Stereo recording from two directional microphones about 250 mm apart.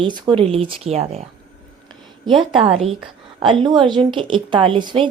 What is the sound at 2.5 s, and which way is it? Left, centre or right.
Speech, right.